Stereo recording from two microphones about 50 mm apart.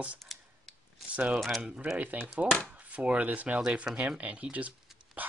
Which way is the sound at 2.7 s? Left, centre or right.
Right.